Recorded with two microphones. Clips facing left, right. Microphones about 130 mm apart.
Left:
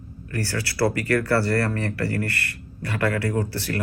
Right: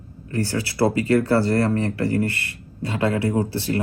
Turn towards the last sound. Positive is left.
turn(degrees=-20)  # may be behind; listen again after turning